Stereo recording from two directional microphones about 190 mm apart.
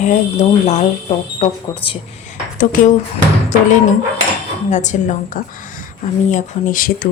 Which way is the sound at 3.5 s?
40° left (ahead or behind).